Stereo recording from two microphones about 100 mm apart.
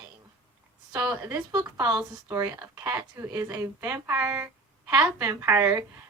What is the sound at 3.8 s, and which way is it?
Speech, 20° right (ahead or behind).